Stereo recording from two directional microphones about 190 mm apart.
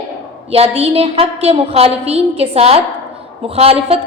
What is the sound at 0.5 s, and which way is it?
A woman's voice, 30° right (ahead or behind).